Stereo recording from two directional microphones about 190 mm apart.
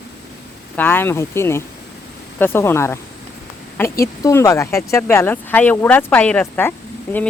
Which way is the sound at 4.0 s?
15° left (ahead or behind).